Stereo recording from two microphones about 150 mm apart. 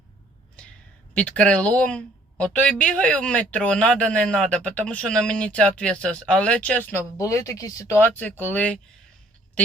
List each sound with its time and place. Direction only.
1.1 s a woman's voice: 10° left (ahead or behind)
7.2 s a woman's voice: 20° left (ahead or behind)